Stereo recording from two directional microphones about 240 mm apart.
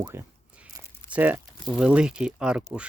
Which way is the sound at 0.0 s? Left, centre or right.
Centre.